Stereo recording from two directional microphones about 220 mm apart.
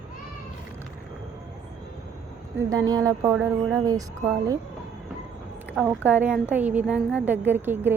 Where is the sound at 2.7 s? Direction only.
15° right (ahead or behind).